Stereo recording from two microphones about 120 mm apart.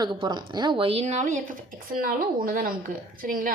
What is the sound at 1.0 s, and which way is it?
Speech, 85° right.